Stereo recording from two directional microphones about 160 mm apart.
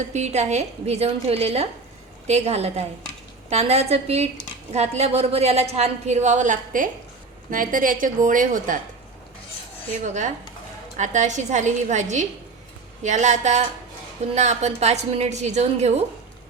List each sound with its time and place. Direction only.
0.1 s a woman's voice: 45° right (ahead or behind)
10.9 s a woman's voice: 50° right (ahead or behind)